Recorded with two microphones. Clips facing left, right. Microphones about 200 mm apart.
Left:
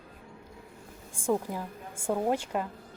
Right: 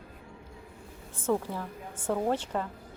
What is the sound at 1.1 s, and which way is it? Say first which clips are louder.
A woman's voice: even; 10° left (ahead or behind).